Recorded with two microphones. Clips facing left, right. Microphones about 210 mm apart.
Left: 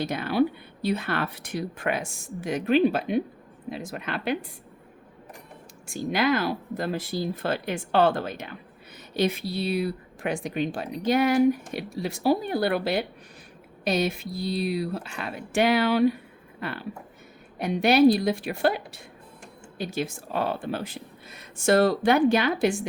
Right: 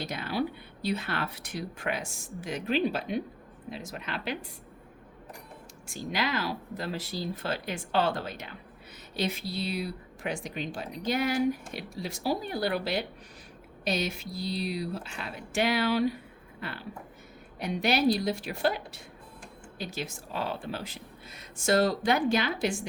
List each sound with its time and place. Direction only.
0.0 s speech: 50° left (ahead or behind)
5.9 s speech: 50° left (ahead or behind)